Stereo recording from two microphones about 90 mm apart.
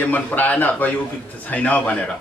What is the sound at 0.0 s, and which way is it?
A man's voice, 20° left (ahead or behind).